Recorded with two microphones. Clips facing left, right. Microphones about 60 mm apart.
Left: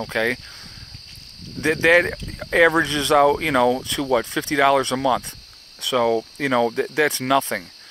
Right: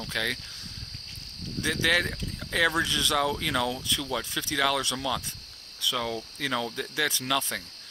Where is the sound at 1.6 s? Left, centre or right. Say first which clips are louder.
Left 10 dB; left.